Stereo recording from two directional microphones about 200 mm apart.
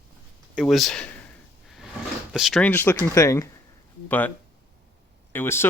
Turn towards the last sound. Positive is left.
turn(degrees=10)  # may be behind; listen again after turning